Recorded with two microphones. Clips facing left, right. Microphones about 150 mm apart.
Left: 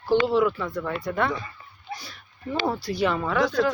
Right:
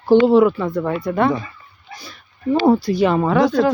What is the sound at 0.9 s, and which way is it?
Speech, 25° right (ahead or behind).